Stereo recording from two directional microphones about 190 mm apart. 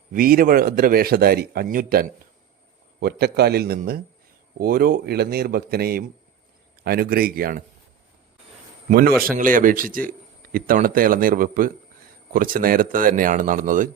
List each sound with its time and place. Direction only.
0.1 s a man's voice: 50° right (ahead or behind)
8.9 s speech: 50° right (ahead or behind)